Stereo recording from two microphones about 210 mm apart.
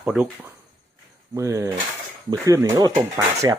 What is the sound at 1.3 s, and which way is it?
Speech, 15° right (ahead or behind).